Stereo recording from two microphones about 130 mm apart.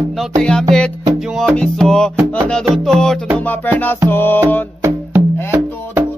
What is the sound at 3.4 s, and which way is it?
Music, 15° left (ahead or behind).